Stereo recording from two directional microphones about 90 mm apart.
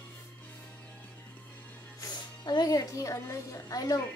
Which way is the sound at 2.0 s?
45° left (ahead or behind).